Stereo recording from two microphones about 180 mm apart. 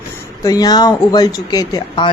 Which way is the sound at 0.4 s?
20° left (ahead or behind).